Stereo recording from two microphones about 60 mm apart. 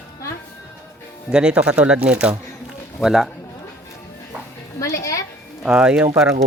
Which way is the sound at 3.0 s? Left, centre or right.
Centre.